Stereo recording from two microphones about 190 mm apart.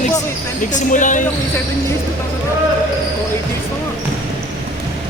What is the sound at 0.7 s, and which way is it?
Speech, 40° left (ahead or behind).